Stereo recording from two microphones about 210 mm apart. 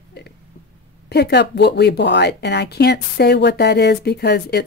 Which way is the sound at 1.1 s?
50° left (ahead or behind).